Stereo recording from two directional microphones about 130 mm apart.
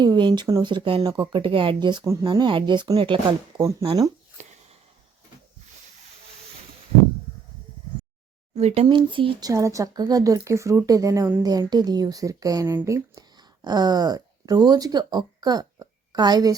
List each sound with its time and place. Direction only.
0.0 s speech: 35° right (ahead or behind)
3.6 s a woman's voice: 25° right (ahead or behind)
4.4 s a sound: 65° right (ahead or behind)
8.5 s speech: 55° right (ahead or behind)
8.9 s speech: 40° right (ahead or behind)
9.5 s a woman's voice: 25° right (ahead or behind)